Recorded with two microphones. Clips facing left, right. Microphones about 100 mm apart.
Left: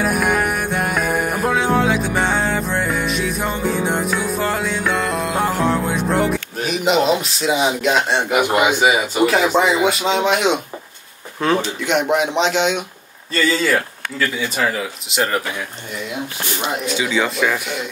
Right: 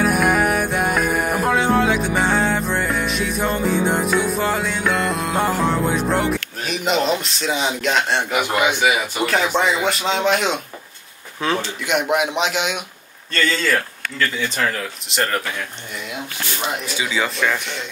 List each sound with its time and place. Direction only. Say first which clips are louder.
0.0 s music: right 1 dB; centre (ahead or behind)
8.4 s speech: left 4 dB; 20° left (ahead or behind)
9.2 s speech: left 4 dB; 5° left (ahead or behind)
12.1 s a man's voice: left 3 dB; 10° right (ahead or behind)
13.3 s speech: left 2 dB; 5° left (ahead or behind)
16.8 s speech: left 3 dB; centre (ahead or behind)